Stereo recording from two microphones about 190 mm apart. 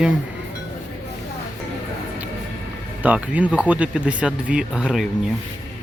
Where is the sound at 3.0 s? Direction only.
10° right (ahead or behind).